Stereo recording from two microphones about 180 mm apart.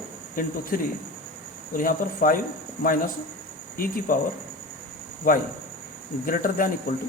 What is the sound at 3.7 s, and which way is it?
Speech, 50° left (ahead or behind).